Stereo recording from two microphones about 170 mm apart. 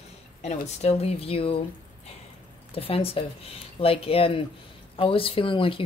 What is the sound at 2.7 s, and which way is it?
Speech, 35° left (ahead or behind).